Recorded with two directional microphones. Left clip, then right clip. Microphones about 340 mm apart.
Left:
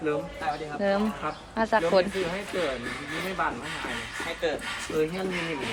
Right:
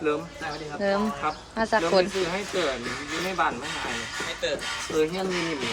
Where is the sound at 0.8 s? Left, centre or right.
Centre.